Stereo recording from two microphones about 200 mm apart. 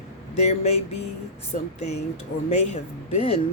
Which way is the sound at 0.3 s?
35° left (ahead or behind).